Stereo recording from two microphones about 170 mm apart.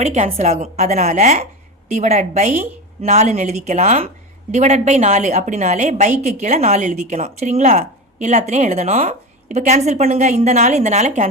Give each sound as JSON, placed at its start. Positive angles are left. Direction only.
{"t": 0.0, "sound": "a woman's voice", "side_deg": -40}